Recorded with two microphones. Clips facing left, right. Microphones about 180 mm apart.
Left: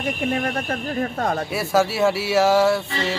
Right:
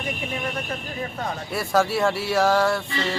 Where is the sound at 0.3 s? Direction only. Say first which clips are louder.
Left 5 dB; 55° left (ahead or behind).